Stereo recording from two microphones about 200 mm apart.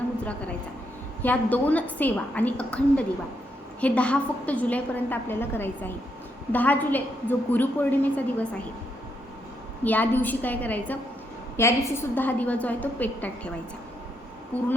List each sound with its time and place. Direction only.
1.2 s a woman's voice: 10° left (ahead or behind)
9.8 s a woman's voice: 10° left (ahead or behind)